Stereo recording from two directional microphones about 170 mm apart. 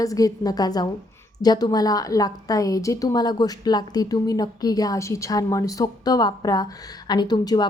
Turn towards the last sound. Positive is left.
turn(degrees=25)  # may be behind; listen again after turning